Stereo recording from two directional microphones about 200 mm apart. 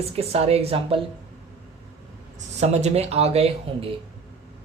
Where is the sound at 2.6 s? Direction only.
35° right (ahead or behind).